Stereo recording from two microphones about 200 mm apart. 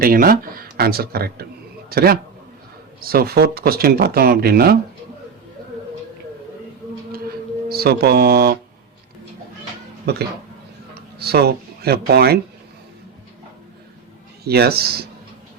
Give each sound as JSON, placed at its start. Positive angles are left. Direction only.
{"t": 0.0, "sound": "speech", "side_deg": -45}
{"t": 7.7, "sound": "speech", "side_deg": -50}
{"t": 10.1, "sound": "speech", "side_deg": -55}
{"t": 14.4, "sound": "speech", "side_deg": -50}